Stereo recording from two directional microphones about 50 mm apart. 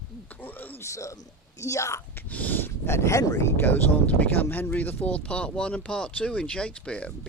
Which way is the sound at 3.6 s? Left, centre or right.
Left.